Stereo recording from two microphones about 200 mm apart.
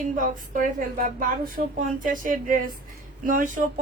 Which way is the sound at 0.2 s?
40° right (ahead or behind).